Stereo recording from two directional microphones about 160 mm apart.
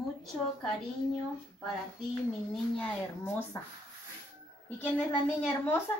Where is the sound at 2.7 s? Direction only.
15° left (ahead or behind).